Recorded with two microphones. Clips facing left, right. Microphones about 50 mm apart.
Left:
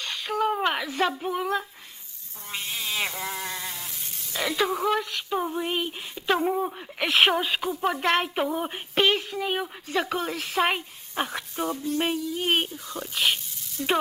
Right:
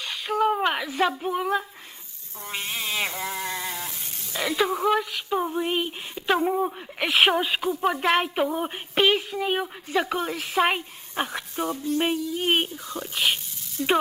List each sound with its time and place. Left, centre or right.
0.0 s a sound: centre
2.5 s frog: centre
3.8 s sizzle: right
4.4 s speech: centre